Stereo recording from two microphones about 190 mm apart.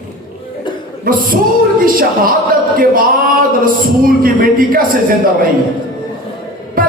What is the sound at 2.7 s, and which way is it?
A woman's voice, 45° right (ahead or behind).